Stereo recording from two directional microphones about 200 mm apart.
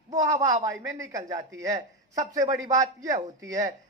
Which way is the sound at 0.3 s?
20° right (ahead or behind).